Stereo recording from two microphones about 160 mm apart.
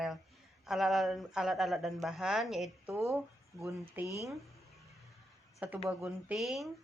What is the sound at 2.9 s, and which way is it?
Speech, 20° right (ahead or behind).